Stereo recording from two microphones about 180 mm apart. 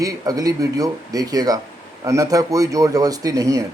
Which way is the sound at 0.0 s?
20° right (ahead or behind).